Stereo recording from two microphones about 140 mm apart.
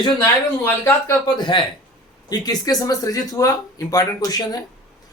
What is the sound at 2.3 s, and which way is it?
A man's voice, 30° left (ahead or behind).